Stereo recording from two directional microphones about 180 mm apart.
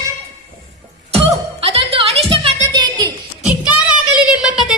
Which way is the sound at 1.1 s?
35° right (ahead or behind).